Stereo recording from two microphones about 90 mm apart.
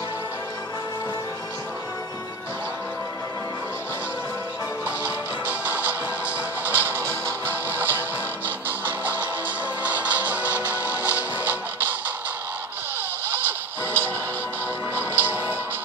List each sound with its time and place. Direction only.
4.8 s music: 15° right (ahead or behind)
13.3 s music: 20° right (ahead or behind)